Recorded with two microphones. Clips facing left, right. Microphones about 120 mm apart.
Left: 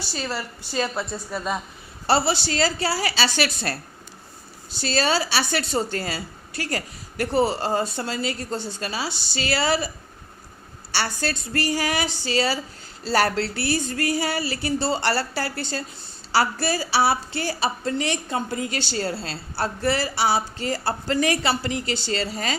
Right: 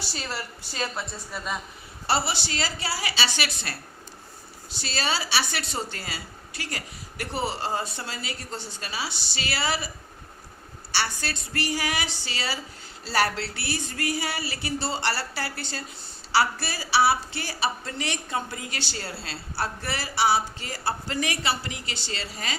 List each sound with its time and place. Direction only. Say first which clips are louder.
0.8 s a woman's voice: left 6 dB; 25° left (ahead or behind); by 3.8 s 40° left (ahead or behind)
4.8 s a woman's voice: left 7 dB; 40° left (ahead or behind)
10.9 s a woman's voice: left 3 dB; 40° left (ahead or behind)
17.9 s a woman's voice: left 5 dB; 30° left (ahead or behind)